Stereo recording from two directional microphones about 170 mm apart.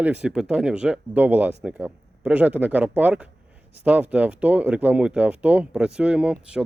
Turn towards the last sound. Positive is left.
turn(degrees=-5)  # may be behind; listen again after turning